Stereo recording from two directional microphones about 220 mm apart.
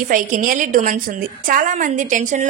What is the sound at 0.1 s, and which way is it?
A woman's voice, 40° right (ahead or behind).